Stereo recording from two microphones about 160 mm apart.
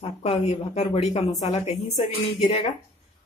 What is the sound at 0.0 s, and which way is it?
A woman's voice, 40° left (ahead or behind).